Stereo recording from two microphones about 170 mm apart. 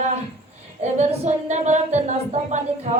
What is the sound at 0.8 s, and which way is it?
Speech, 40° right (ahead or behind).